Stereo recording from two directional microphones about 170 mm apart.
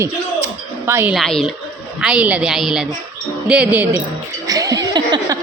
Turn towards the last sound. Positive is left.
turn(degrees=-25)  # may be behind; listen again after turning